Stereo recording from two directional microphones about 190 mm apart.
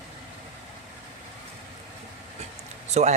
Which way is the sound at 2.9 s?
35° right (ahead or behind).